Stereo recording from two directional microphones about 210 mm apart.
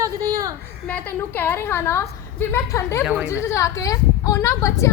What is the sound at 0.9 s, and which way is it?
A woman's voice, 10° left (ahead or behind).